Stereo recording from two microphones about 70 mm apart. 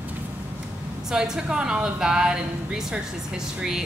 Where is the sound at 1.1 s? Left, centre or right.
Centre.